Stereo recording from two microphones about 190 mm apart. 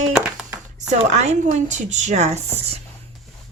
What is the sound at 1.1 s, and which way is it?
Speech, 35° right (ahead or behind).